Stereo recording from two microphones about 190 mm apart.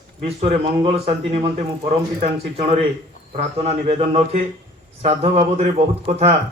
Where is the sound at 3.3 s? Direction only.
35° right (ahead or behind).